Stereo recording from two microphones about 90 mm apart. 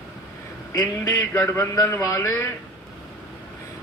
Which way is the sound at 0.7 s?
50° left (ahead or behind).